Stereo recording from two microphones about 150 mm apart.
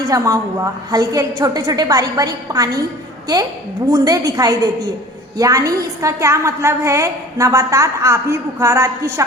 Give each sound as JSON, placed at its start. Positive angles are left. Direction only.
{"t": 0.1, "sound": "a woman's voice", "side_deg": -20}
{"t": 3.9, "sound": "a woman's voice", "side_deg": -25}